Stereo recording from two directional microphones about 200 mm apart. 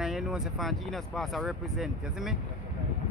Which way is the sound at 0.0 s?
5° right (ahead or behind).